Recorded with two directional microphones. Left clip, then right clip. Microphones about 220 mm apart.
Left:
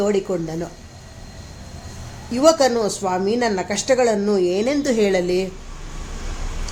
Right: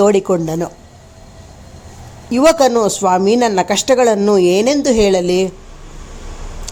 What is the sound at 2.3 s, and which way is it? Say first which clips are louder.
Speech: right 5 dB; 35° right (ahead or behind).